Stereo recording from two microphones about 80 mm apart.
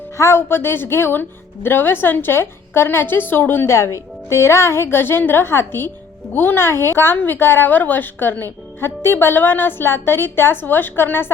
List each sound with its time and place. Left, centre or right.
0.2 s a woman's voice: left